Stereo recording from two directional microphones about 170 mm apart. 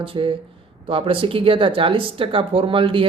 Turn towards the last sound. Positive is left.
turn(degrees=-30)  # may be behind; listen again after turning